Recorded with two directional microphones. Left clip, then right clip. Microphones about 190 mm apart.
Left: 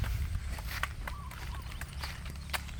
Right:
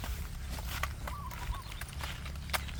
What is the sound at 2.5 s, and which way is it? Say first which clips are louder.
Clip-clop: right 2 dB; 10° right (ahead or behind).